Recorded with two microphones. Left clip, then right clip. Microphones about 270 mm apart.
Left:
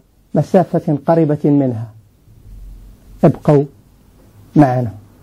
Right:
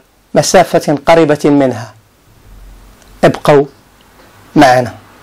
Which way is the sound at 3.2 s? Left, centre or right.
Centre.